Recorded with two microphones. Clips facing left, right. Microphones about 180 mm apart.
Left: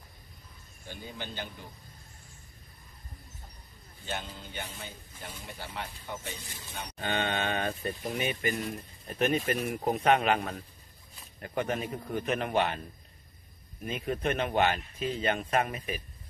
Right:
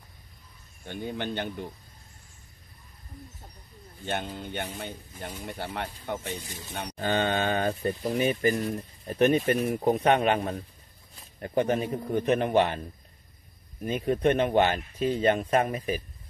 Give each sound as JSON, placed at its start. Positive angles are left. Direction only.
{"t": 0.8, "sound": "speech", "side_deg": -60}
{"t": 4.0, "sound": "speech", "side_deg": -55}
{"t": 13.8, "sound": "speech", "side_deg": -30}